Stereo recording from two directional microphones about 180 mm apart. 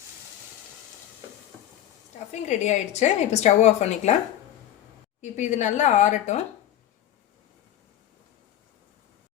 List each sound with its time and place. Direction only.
2.3 s a woman's voice: 40° left (ahead or behind)
5.2 s a woman's voice: 40° left (ahead or behind)